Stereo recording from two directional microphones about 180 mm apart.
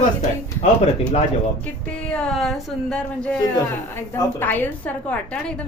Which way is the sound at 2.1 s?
5° left (ahead or behind).